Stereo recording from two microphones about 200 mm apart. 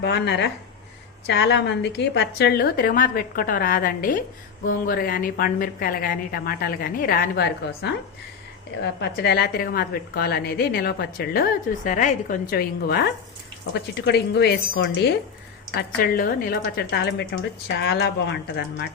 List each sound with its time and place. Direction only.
0.0 s a woman's voice: 60° left (ahead or behind)